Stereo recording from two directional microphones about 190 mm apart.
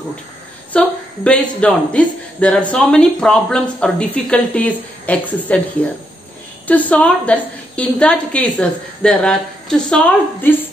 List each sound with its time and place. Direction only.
0.7 s speech: 5° left (ahead or behind)
6.7 s a woman's voice: 5° left (ahead or behind)